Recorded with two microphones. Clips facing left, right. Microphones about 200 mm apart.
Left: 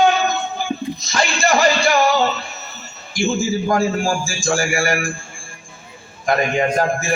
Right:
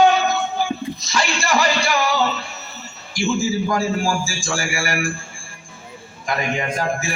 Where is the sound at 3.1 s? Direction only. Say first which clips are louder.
Left 1 dB; 45° left (ahead or behind).